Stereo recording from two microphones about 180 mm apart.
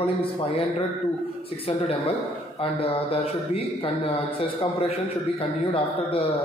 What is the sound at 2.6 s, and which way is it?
Speech, 30° left (ahead or behind).